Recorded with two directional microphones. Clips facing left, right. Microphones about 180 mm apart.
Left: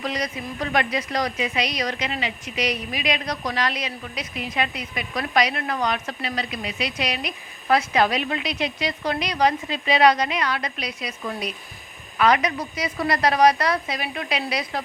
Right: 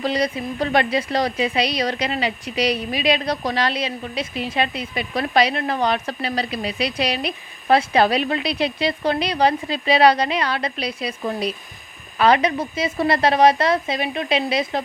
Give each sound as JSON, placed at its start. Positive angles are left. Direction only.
{"t": 0.0, "sound": "a woman's voice", "side_deg": -30}